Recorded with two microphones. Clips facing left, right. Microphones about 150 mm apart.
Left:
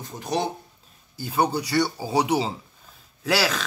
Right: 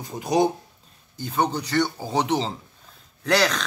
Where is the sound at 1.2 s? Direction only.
10° left (ahead or behind).